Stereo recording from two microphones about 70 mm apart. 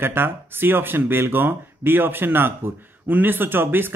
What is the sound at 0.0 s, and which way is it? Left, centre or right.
Speech, right.